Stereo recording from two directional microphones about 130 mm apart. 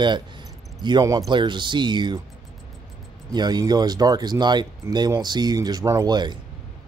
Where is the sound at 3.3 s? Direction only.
30° right (ahead or behind).